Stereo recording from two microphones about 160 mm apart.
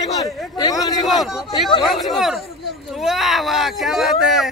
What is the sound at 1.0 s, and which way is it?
A man's voice, centre (ahead or behind).